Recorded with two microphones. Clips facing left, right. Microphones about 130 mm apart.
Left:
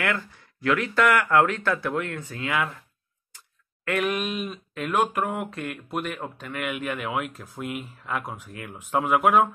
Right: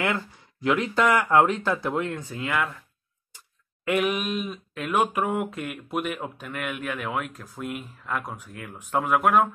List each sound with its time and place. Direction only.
0.0 s speech: 20° right (ahead or behind)
2.3 s speech: centre (ahead or behind)
3.8 s speech: 10° right (ahead or behind); by 9.5 s 5° left (ahead or behind)